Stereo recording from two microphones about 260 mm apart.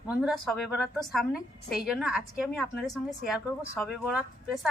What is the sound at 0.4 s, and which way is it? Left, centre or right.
A woman's voice, centre.